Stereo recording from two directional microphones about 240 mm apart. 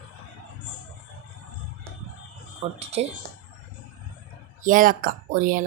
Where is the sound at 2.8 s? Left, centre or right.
Right.